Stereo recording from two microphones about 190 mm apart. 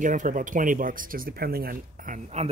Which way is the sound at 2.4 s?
35° right (ahead or behind).